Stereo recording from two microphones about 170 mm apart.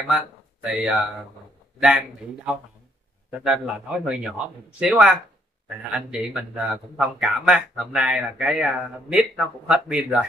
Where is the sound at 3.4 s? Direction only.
5° right (ahead or behind).